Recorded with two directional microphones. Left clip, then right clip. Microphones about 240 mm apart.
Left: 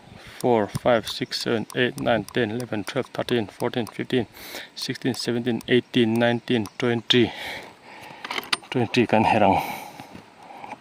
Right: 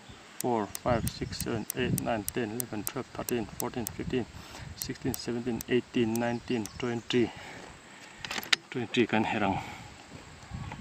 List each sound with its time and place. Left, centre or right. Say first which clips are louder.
0.4 s speech: left 9 dB; left
8.7 s speech: left 8 dB; left